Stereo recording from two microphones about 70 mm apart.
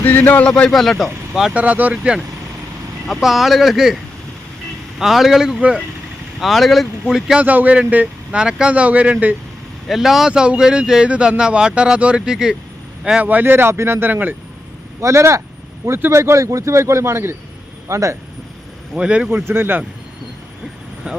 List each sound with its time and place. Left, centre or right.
0.0 s speech: left
0.4 s a man's voice: centre
1.5 s a man's voice: right
3.1 s speech: centre
6.4 s speech: centre
7.3 s a man's voice: right
9.9 s speech: centre
13.2 s a man's voice: right
15.0 s a man's voice: right
18.9 s speech: centre
19.5 s a man's voice: right
21.0 s speech: centre